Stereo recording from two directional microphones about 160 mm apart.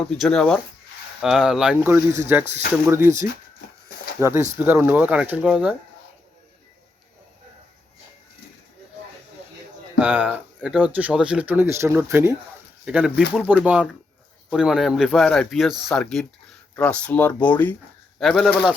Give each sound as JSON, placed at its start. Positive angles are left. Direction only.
{"t": 0.0, "sound": "speech", "side_deg": 5}
{"t": 10.0, "sound": "speech", "side_deg": -10}